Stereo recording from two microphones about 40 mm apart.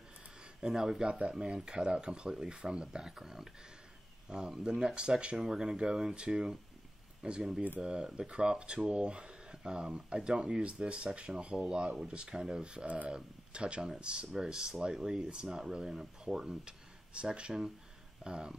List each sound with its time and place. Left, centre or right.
0.6 s speech: centre
1.0 s speech: right
12.8 s speech: right